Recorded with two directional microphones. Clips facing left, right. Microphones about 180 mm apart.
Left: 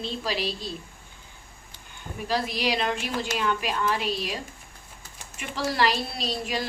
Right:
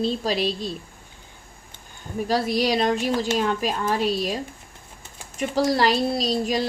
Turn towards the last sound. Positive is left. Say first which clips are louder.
# right 8 dB
turn(degrees=-40)  # may be behind; listen again after turning